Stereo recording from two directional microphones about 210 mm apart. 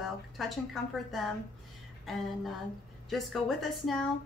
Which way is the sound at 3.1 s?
Centre (ahead or behind).